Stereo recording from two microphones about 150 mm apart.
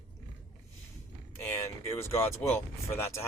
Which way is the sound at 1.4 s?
20° left (ahead or behind).